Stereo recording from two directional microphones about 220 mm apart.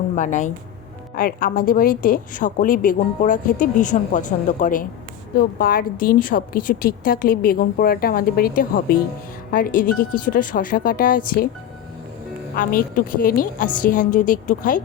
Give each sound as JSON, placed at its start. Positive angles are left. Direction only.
{"t": 0.2, "sound": "a woman's voice", "side_deg": 35}
{"t": 12.5, "sound": "a woman's voice", "side_deg": 40}